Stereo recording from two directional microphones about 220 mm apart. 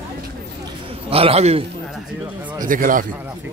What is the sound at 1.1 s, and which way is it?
Speech, 25° right (ahead or behind).